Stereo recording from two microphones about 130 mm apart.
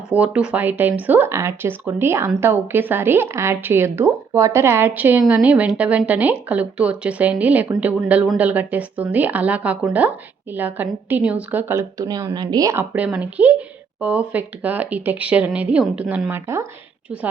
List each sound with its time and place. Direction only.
0.1 s speech: 10° right (ahead or behind)
12.0 s a woman's voice: 30° right (ahead or behind)
12.9 s speech: 10° right (ahead or behind)